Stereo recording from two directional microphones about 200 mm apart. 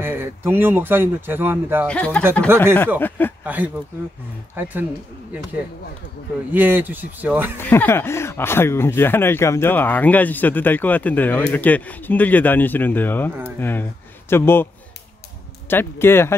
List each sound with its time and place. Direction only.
0.0 s speech: 10° right (ahead or behind)
1.9 s speech: 5° left (ahead or behind)
2.4 s speech: 10° right (ahead or behind)
3.0 s speech: 10° left (ahead or behind)
3.4 s speech: 5° right (ahead or behind)
6.5 s speech: 10° right (ahead or behind)
7.5 s speech: 10° left (ahead or behind)
15.7 s speech: 10° left (ahead or behind)